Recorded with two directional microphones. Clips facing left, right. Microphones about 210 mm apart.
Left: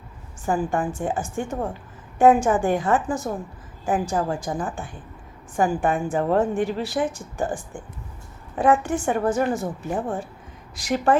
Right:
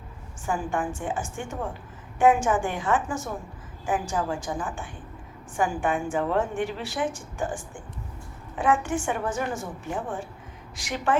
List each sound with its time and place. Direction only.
0.4 s a woman's voice: 40° left (ahead or behind)